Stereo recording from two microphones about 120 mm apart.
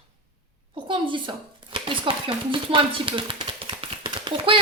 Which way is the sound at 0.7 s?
45° right (ahead or behind).